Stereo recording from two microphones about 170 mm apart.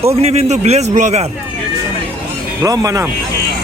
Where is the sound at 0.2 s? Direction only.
40° right (ahead or behind).